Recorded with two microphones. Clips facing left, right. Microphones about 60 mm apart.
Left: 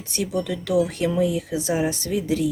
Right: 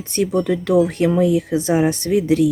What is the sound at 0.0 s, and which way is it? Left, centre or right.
Speech, right.